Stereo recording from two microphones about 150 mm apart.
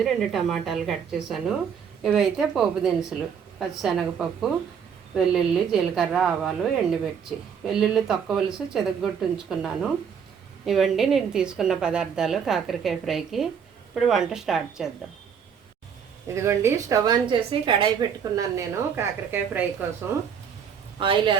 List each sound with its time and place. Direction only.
0.0 s a woman's voice: centre (ahead or behind)
16.2 s a woman's voice: 20° right (ahead or behind)
17.5 s a woman's voice: 35° right (ahead or behind); by 19.6 s 15° right (ahead or behind)
21.0 s speech: 35° right (ahead or behind)